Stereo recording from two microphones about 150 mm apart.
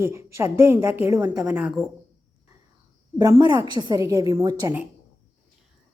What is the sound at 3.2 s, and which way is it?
A woman's voice, 25° right (ahead or behind).